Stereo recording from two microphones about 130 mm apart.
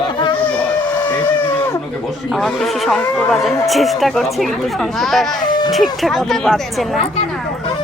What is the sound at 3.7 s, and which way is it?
Speech, centre (ahead or behind).